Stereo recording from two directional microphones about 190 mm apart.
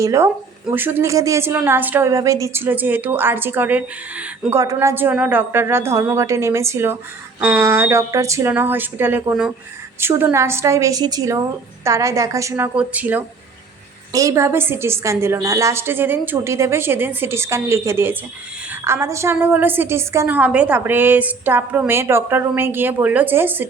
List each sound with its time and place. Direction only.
0.0 s a woman's voice: 15° right (ahead or behind)